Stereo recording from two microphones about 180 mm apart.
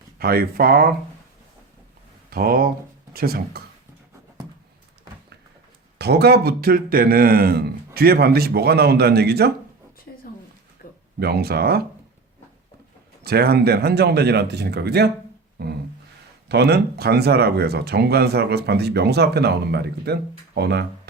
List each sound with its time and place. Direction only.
0.2 s speech: 55° right (ahead or behind)
2.3 s speech: 55° right (ahead or behind)
6.0 s speech: 65° right (ahead or behind)
11.2 s speech: 60° right (ahead or behind)
13.2 s speech: 60° right (ahead or behind)
15.6 s a sound: 60° right (ahead or behind)
16.5 s speech: 65° right (ahead or behind)